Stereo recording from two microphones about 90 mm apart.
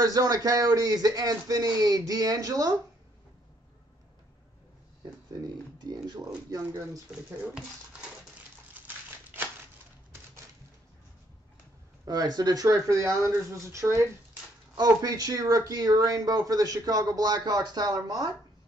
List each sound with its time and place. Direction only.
0.0 s speech: 45° right (ahead or behind)
6.2 s speech: 40° right (ahead or behind)
8.8 s crumpling: 20° right (ahead or behind)
12.1 s speech: 50° right (ahead or behind)